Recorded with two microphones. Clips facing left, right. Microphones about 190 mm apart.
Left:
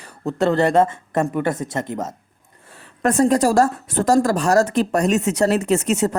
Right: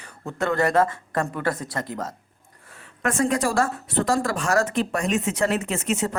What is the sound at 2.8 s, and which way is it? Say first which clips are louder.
Speech: left 6 dB; 40° left (ahead or behind).